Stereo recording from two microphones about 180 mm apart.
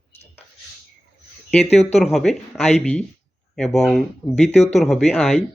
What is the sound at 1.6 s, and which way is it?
Speech, 35° left (ahead or behind).